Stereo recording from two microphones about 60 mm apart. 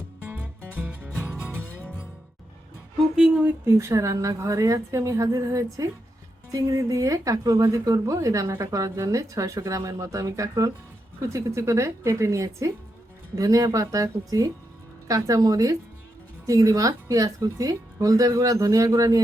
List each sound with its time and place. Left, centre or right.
0.8 s music: right
3.8 s a woman's voice: right
6.5 s a woman's voice: right
13.3 s speech: right